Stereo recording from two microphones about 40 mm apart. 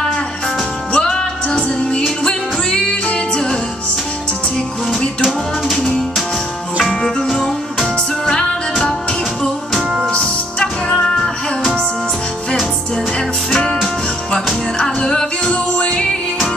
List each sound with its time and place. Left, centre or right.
0.9 s music: left
5.7 s music: centre
7.2 s music: centre
10.2 s music: centre
13.5 s music: left